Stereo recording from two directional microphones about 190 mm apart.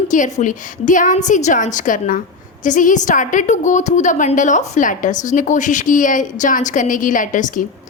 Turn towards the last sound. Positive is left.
turn(degrees=45)  # may be behind; listen again after turning